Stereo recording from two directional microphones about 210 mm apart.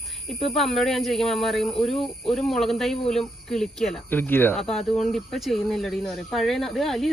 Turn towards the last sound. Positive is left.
turn(degrees=0)  # may be behind; listen again after turning